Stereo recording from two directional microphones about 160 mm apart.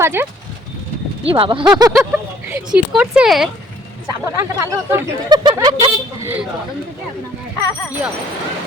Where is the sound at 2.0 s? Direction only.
10° right (ahead or behind).